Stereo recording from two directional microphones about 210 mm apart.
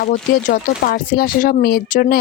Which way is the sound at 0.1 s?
40° left (ahead or behind).